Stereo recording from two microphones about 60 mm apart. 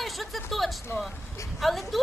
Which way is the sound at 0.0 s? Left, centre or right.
Centre.